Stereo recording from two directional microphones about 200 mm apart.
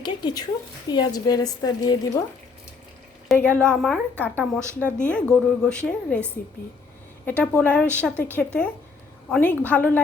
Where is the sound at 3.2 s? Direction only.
5° left (ahead or behind).